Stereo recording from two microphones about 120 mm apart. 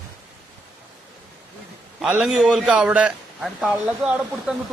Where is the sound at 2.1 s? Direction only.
10° right (ahead or behind).